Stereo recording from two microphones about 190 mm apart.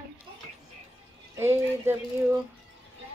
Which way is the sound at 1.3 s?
15° right (ahead or behind).